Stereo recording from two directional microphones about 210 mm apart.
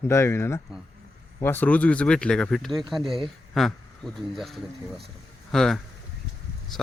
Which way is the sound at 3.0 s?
25° right (ahead or behind).